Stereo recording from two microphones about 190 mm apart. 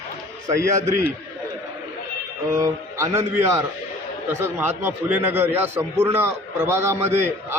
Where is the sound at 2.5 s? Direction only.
15° right (ahead or behind).